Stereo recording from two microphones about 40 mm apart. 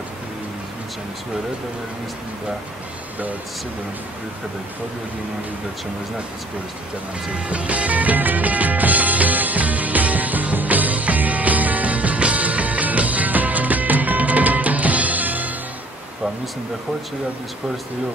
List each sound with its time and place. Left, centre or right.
7.3 s music: right